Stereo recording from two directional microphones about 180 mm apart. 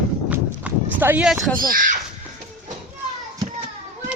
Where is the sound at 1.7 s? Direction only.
50° right (ahead or behind).